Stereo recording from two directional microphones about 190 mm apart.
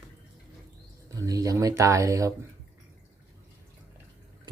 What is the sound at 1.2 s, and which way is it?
Speech, 15° right (ahead or behind).